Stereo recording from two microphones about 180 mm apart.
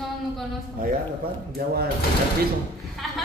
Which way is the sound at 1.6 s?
55° right (ahead or behind).